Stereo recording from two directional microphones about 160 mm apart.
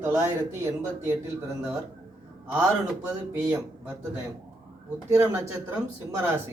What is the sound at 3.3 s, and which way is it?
Speech, 15° right (ahead or behind).